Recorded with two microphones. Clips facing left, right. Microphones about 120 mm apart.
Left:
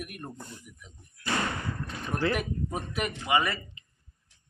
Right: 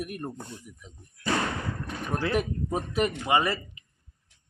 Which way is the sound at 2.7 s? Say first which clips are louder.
Right 6 dB; 30° right (ahead or behind).